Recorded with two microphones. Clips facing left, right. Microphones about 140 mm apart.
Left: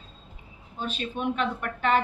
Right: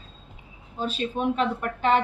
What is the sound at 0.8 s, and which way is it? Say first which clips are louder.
Speech: right 4 dB; 35° right (ahead or behind).